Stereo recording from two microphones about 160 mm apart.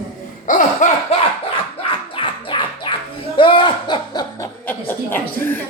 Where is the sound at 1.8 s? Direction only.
30° left (ahead or behind).